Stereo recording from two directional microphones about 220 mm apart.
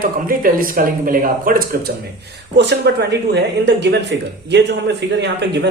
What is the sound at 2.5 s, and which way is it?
Speech, 50° right (ahead or behind).